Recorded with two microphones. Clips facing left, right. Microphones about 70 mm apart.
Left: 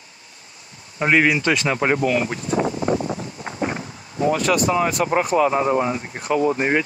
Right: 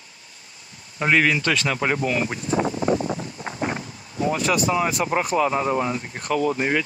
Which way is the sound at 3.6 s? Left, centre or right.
Left.